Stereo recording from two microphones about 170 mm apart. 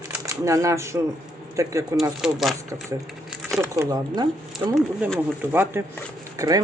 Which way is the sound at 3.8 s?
20° right (ahead or behind).